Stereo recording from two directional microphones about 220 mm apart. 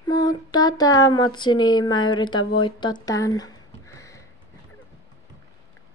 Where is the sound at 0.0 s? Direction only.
20° left (ahead or behind).